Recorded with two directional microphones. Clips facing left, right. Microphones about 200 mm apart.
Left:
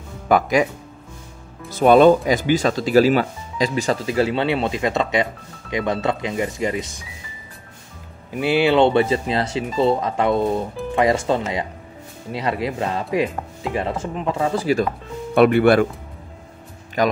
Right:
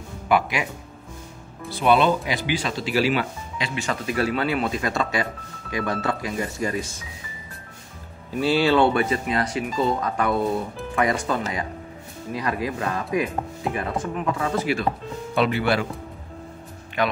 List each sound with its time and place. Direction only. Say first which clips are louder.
0.3 s speech: left 5 dB; 40° left (ahead or behind)
1.7 s speech: left 7 dB; 45° left (ahead or behind); by 7.0 s 20° left (ahead or behind)
8.4 s speech: left 3 dB; 15° left (ahead or behind); by 14.9 s 35° left (ahead or behind)
15.3 s speech: left 8 dB; 55° left (ahead or behind)
17.0 s speech: left 5 dB; 40° left (ahead or behind)